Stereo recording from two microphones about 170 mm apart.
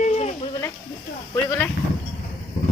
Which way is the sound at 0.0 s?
40° left (ahead or behind).